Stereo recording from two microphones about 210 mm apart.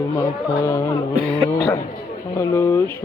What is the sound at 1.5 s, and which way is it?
Speech, 15° left (ahead or behind).